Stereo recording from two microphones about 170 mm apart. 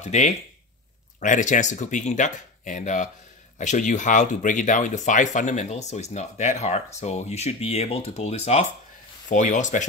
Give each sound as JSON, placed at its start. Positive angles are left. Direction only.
{"t": 0.0, "sound": "speech", "side_deg": 40}